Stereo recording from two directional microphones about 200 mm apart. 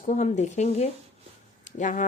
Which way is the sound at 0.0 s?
35° left (ahead or behind).